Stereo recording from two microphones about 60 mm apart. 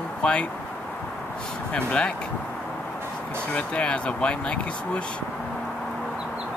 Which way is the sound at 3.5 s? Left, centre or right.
Centre.